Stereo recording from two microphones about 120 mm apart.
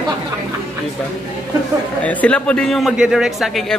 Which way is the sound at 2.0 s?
10° left (ahead or behind).